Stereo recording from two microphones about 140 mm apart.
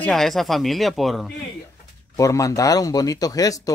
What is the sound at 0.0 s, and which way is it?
Speech, 5° left (ahead or behind).